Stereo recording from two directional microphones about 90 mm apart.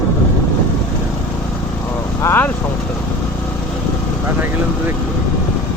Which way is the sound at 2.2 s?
25° left (ahead or behind).